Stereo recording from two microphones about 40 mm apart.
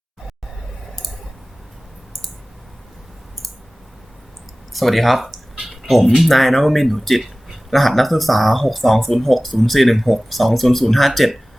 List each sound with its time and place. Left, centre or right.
4.7 s speech: centre